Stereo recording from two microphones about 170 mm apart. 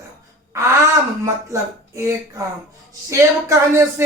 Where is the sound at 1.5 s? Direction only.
20° right (ahead or behind).